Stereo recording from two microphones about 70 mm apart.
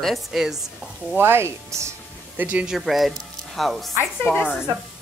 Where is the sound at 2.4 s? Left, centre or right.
Right.